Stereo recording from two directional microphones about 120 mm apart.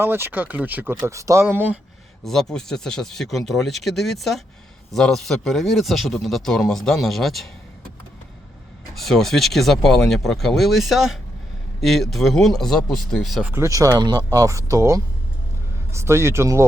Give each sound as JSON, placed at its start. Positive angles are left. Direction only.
{"t": 0.0, "sound": "speech", "side_deg": -20}
{"t": 2.2, "sound": "speech", "side_deg": 5}
{"t": 9.0, "sound": "speech", "side_deg": 0}
{"t": 13.4, "sound": "speech", "side_deg": -20}